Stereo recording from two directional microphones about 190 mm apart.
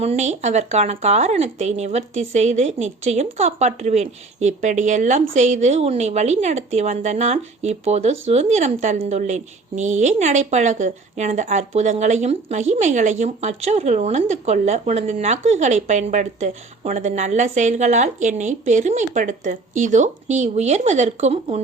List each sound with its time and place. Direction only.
0.0 s a woman's voice: 35° right (ahead or behind)